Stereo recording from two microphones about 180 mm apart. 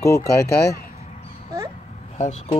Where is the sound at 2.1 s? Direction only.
40° left (ahead or behind).